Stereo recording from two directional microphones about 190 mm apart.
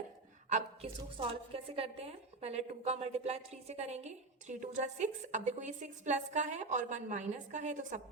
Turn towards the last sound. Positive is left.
turn(degrees=-40)  # may be behind; listen again after turning